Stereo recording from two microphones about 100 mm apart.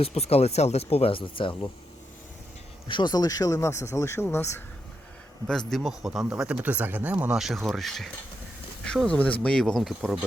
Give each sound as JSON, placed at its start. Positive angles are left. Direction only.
{"t": 0.0, "sound": "speech", "side_deg": 90}
{"t": 2.8, "sound": "speech", "side_deg": 50}
{"t": 5.5, "sound": "speech", "side_deg": 5}